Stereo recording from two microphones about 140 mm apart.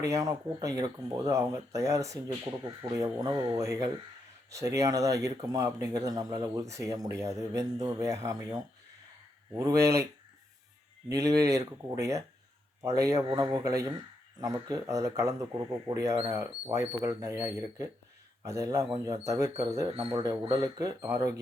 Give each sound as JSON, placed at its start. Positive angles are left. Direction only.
{"t": 0.0, "sound": "speech", "side_deg": -25}
{"t": 11.1, "sound": "speech", "side_deg": -25}